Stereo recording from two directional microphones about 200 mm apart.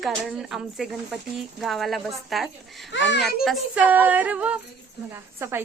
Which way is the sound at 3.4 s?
5° right (ahead or behind).